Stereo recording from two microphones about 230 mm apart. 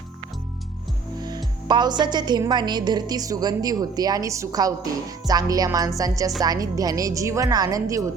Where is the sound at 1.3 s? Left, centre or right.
Centre.